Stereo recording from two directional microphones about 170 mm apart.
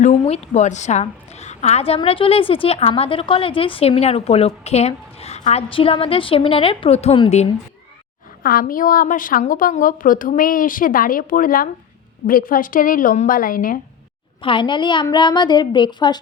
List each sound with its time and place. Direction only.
0.0 s a woman's voice: 45° left (ahead or behind)
8.4 s a woman's voice: 55° left (ahead or behind)
14.4 s a woman's voice: 30° left (ahead or behind)